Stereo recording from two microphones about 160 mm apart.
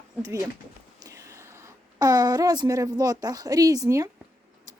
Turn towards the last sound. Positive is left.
turn(degrees=-20)  # may be behind; listen again after turning